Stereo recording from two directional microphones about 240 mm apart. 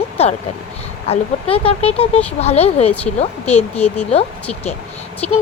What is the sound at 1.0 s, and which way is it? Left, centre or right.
Speech, left.